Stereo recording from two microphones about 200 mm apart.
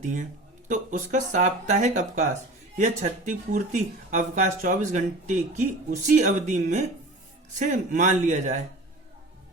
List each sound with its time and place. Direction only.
0.0 s speech: 40° right (ahead or behind)